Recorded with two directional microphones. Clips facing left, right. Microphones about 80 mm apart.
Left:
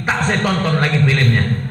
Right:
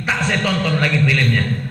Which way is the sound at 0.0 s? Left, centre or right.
Left.